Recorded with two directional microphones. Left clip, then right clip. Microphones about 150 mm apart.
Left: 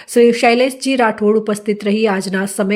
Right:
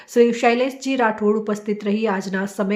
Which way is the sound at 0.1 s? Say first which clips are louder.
Left 5 dB; 15° left (ahead or behind).